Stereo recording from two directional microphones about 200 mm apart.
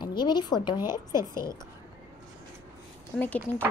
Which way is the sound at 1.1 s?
15° right (ahead or behind).